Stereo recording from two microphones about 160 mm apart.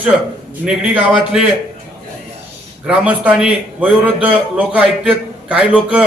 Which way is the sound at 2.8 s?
5° right (ahead or behind).